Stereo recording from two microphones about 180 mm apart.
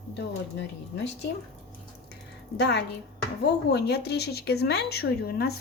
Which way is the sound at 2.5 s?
70° left (ahead or behind).